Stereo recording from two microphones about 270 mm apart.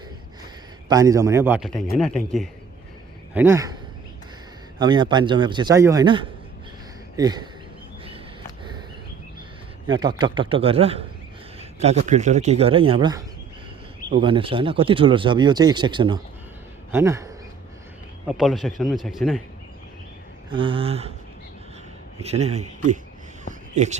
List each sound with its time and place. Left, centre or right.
0.9 s a man's voice: centre
4.8 s a man's voice: centre
9.8 s a man's voice: centre
18.3 s speech: centre
20.5 s speech: centre
22.2 s speech: right
23.7 s speech: right